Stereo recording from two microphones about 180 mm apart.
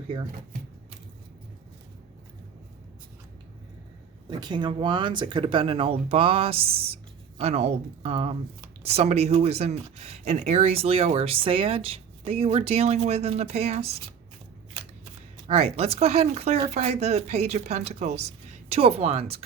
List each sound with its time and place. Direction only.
4.3 s speech: 25° right (ahead or behind)
15.4 s speech: 35° right (ahead or behind)